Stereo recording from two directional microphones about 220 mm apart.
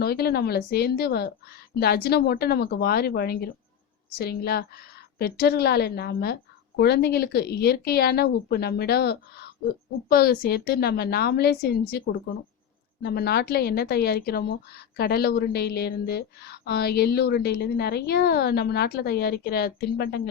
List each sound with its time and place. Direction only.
0.0 s speech: 45° left (ahead or behind)